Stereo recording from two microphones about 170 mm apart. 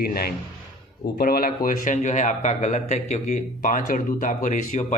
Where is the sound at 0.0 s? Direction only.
65° left (ahead or behind).